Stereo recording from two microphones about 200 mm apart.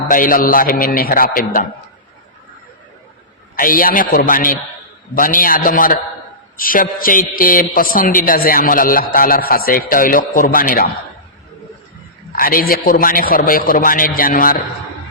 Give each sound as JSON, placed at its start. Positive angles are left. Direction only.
{"t": 0.1, "sound": "a man's voice", "side_deg": 45}
{"t": 3.5, "sound": "a man's voice", "side_deg": 45}
{"t": 12.3, "sound": "a man's voice", "side_deg": 45}